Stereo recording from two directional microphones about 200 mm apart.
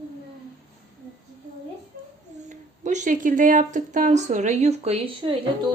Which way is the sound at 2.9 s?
40° right (ahead or behind).